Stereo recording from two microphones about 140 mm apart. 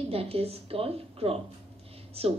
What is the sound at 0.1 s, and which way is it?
A woman's voice, 45° right (ahead or behind).